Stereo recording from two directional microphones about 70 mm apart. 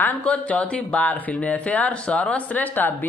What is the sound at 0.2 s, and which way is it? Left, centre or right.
Speech, centre.